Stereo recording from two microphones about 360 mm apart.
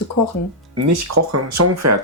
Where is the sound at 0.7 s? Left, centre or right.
Right.